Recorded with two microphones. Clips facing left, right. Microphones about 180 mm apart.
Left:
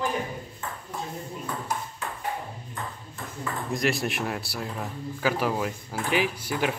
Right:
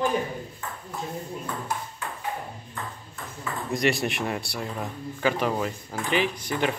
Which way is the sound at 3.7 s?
Centre (ahead or behind).